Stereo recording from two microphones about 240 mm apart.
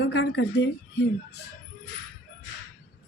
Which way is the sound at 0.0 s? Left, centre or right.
Left.